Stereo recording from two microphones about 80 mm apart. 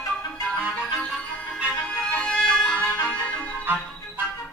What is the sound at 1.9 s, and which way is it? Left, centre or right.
Music, centre.